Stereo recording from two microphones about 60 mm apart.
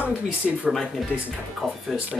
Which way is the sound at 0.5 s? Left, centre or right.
Centre.